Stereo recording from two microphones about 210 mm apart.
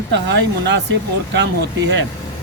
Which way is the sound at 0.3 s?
55° right (ahead or behind).